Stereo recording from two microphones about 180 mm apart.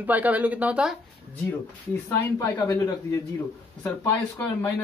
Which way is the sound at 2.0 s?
15° left (ahead or behind).